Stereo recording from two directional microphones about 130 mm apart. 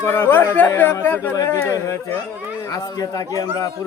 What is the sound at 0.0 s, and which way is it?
A man's voice, 15° left (ahead or behind).